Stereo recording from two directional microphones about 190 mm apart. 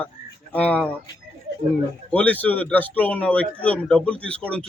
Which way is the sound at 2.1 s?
5° left (ahead or behind).